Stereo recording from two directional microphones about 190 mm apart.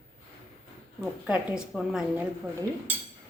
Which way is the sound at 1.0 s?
5° right (ahead or behind).